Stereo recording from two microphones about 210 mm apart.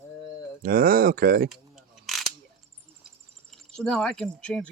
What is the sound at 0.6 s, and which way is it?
Speech, 45° right (ahead or behind).